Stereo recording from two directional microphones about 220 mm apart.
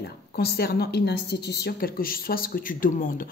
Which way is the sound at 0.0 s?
45° left (ahead or behind).